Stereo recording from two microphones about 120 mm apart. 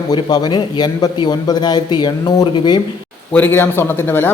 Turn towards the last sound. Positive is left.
turn(degrees=20)  # may be behind; listen again after turning